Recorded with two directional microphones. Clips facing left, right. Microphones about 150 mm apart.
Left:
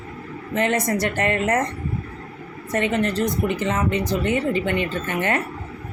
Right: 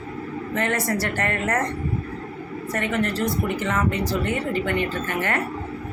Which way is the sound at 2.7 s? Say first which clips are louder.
Left 3 dB; 20° left (ahead or behind).